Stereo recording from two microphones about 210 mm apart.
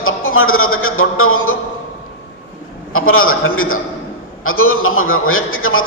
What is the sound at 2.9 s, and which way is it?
A man's voice, 80° left.